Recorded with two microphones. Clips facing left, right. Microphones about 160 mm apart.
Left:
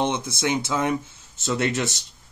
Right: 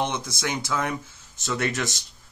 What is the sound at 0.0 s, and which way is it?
Speech, 25° left (ahead or behind).